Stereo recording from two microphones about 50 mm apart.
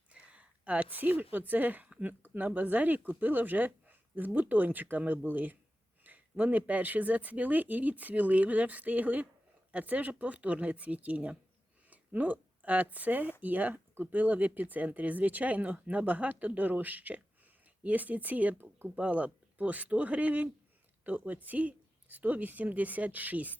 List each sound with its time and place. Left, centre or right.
0.1 s a woman's voice: right
18.5 s speech: right
18.9 s speech: right